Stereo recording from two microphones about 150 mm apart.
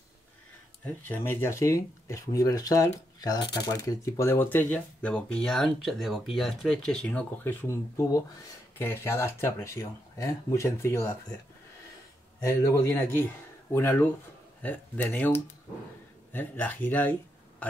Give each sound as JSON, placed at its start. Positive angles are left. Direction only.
{"t": 1.0, "sound": "speech", "side_deg": 15}
{"t": 12.4, "sound": "a man's voice", "side_deg": 15}